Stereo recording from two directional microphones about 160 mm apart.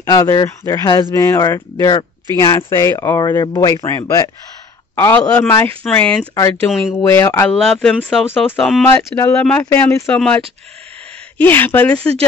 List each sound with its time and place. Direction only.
0.0 s speech: 20° left (ahead or behind)
6.7 s speech: 5° right (ahead or behind)
7.0 s speech: 15° left (ahead or behind)
7.4 s speech: centre (ahead or behind)
8.9 s speech: 15° left (ahead or behind)
9.4 s speech: 5° left (ahead or behind)